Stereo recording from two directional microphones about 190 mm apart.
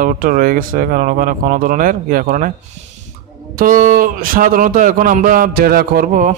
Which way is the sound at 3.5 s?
45° right (ahead or behind).